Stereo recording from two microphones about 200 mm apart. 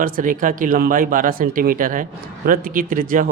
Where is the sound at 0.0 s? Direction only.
40° right (ahead or behind).